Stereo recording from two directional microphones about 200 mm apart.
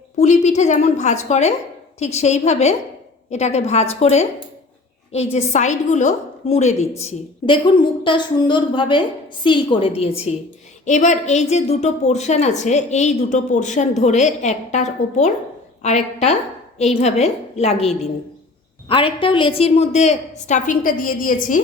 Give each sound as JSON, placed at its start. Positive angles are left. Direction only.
{"t": 0.2, "sound": "a woman's voice", "side_deg": 35}
{"t": 5.5, "sound": "a woman's voice", "side_deg": 35}
{"t": 19.2, "sound": "a woman's voice", "side_deg": 25}